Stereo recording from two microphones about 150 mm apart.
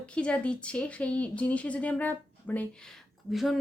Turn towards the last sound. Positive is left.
turn(degrees=0)  # may be behind; listen again after turning